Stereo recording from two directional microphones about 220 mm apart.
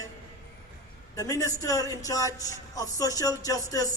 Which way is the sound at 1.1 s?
15° left (ahead or behind).